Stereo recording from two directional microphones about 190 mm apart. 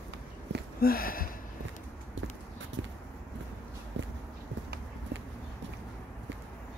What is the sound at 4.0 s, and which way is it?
Walk, 75° right (ahead or behind).